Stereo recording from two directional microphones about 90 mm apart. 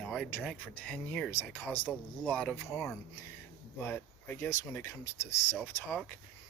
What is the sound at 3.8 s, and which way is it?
Speech, 25° left (ahead or behind).